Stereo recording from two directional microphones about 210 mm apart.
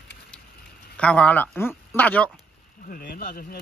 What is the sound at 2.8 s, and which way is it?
Speech, 45° left (ahead or behind).